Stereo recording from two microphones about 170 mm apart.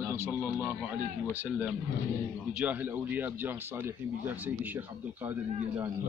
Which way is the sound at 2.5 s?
5° right (ahead or behind).